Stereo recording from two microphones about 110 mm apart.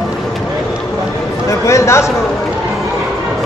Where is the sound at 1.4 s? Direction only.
25° left (ahead or behind).